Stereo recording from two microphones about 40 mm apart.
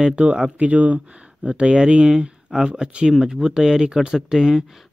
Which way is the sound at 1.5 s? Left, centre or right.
Right.